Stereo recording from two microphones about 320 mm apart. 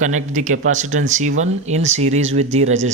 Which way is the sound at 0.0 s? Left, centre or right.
Right.